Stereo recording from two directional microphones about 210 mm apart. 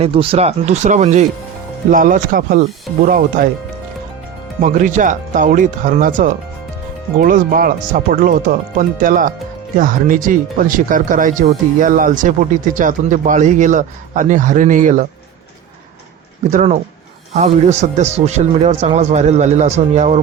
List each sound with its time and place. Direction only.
0.0 s a man's voice: 25° right (ahead or behind)
4.6 s a man's voice: 35° right (ahead or behind)
16.5 s a man's voice: 35° right (ahead or behind)